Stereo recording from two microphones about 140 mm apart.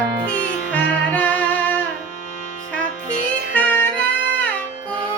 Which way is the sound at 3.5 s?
15° left (ahead or behind).